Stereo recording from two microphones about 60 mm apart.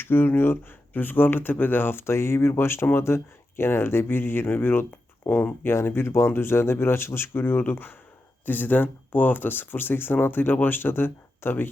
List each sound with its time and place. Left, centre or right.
0.0 s speech: left